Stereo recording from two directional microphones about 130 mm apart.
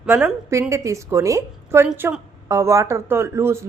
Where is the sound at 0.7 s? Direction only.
25° right (ahead or behind).